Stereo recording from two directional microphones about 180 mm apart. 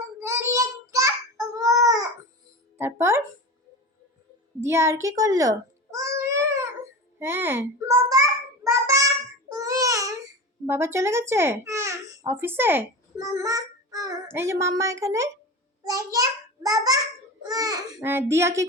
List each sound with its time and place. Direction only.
0.2 s child singing: 15° right (ahead or behind)
2.7 s a child's voice: 15° right (ahead or behind)
4.6 s a sound: 15° right (ahead or behind)
7.2 s a child's voice: 10° right (ahead or behind)
8.6 s child singing: 20° right (ahead or behind)
9.5 s a sound: 20° right (ahead or behind)
10.7 s a child's voice: 15° right (ahead or behind)